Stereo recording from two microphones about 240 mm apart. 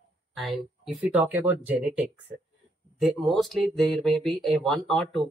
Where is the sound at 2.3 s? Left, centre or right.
Right.